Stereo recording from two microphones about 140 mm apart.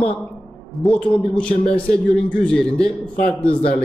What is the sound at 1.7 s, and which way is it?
Speech, 10° left (ahead or behind).